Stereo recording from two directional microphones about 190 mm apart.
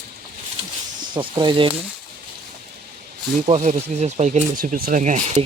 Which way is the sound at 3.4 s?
35° right (ahead or behind).